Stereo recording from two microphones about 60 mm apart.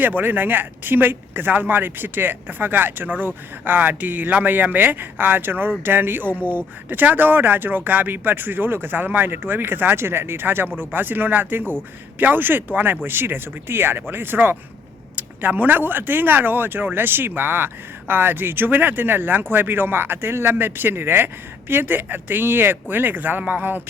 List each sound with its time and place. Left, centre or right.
0.2 s speech: right